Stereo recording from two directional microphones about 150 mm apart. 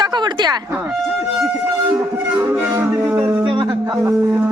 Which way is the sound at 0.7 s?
10° right (ahead or behind).